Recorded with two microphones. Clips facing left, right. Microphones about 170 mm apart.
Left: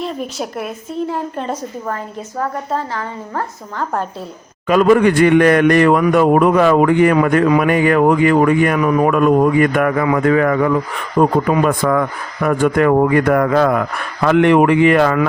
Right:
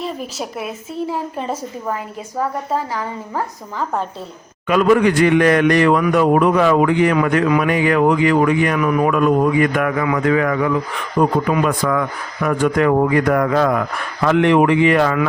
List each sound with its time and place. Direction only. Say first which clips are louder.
0.0 s a woman's voice: left 3 dB; centre (ahead or behind)
4.7 s speech: left 2 dB; 40° left (ahead or behind)
7.4 s speech: left 3 dB; 35° left (ahead or behind)
7.7 s speech: left 2 dB; 45° left (ahead or behind)